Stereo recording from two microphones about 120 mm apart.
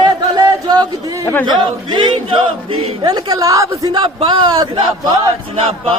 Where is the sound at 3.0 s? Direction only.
35° right (ahead or behind).